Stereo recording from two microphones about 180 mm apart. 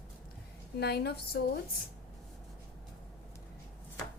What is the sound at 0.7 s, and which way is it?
Speech, 65° left (ahead or behind).